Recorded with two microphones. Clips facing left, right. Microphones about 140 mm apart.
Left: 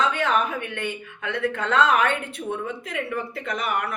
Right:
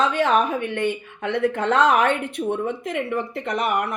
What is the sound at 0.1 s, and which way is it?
Speech, 30° right (ahead or behind).